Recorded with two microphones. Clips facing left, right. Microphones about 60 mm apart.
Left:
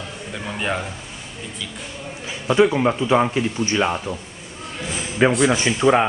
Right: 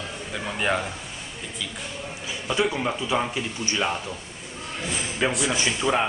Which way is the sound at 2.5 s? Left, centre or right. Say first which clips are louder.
Left 8 dB; left.